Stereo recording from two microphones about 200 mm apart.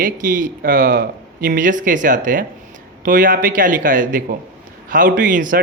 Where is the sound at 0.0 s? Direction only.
40° right (ahead or behind).